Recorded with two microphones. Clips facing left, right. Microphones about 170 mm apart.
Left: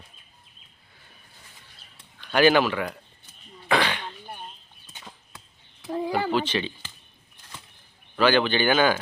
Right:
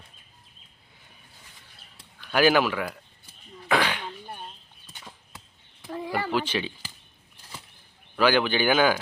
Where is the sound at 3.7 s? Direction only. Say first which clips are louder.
Left 1 dB; 10° right (ahead or behind).